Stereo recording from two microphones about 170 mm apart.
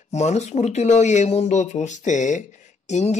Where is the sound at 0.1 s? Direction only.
40° left (ahead or behind).